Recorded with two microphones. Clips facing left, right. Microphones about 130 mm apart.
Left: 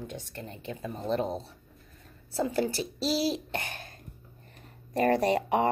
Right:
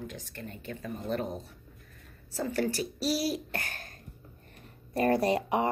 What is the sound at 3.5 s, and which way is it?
Speech, 20° left (ahead or behind).